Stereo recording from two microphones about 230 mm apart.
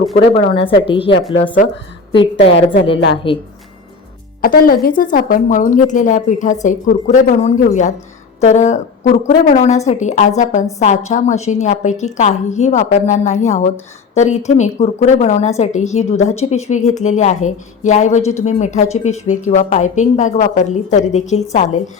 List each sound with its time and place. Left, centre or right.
0.1 s speech: left
0.3 s a woman's voice: left
4.4 s a woman's voice: left